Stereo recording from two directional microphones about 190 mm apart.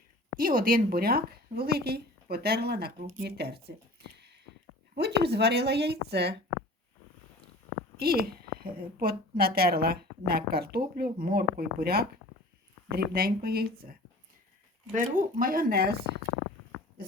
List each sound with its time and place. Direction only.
0.3 s a woman's voice: 45° right (ahead or behind)
4.9 s a woman's voice: 60° right (ahead or behind)
7.9 s a woman's voice: 50° right (ahead or behind)
14.9 s a woman's voice: 45° right (ahead or behind)